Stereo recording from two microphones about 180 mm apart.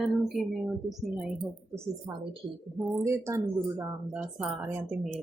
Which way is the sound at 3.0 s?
15° right (ahead or behind).